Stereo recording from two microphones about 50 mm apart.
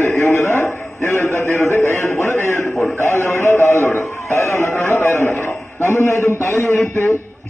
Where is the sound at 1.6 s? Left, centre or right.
Left.